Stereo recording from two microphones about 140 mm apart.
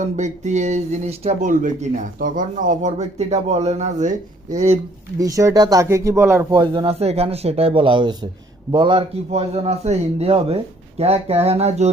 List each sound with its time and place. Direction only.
0.0 s a man's voice: 55° right (ahead or behind)
5.2 s speech: 25° right (ahead or behind)
6.5 s speech: 35° right (ahead or behind)
6.8 s a man's voice: 45° right (ahead or behind)